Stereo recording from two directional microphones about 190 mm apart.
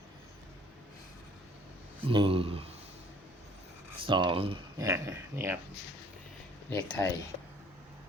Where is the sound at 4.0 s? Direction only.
25° right (ahead or behind).